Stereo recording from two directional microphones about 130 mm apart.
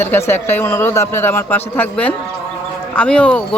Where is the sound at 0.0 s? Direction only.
15° left (ahead or behind).